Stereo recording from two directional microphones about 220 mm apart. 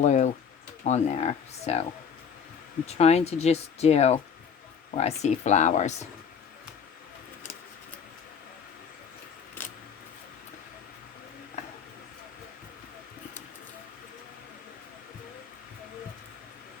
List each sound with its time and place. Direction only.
0.0 s speech: 35° left (ahead or behind)
2.8 s speech: 30° left (ahead or behind)
9.6 s vehicle: 10° left (ahead or behind)